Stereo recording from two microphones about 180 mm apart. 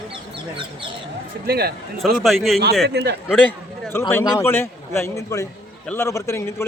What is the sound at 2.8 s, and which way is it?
Speech, 65° right (ahead or behind).